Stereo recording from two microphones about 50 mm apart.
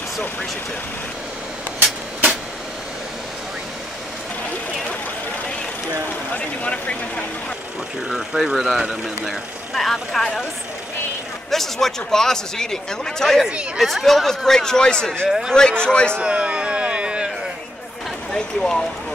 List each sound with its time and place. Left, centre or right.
6.3 s speech: left
8.1 s speech: centre
9.8 s speech: centre
11.5 s speech: centre
15.2 s speech: centre
15.8 s speech: centre
16.2 s a sound: right
18.3 s speech: centre